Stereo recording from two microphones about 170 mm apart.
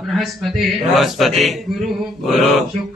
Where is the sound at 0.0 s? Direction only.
Centre (ahead or behind).